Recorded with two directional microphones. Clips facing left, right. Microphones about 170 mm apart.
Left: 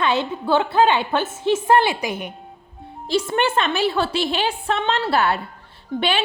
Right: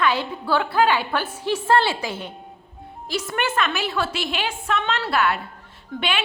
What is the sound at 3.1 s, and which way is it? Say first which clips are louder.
A woman's voice: left 5 dB; 30° left (ahead or behind).